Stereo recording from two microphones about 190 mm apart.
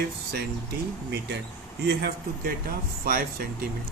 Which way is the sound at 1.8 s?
60° right (ahead or behind).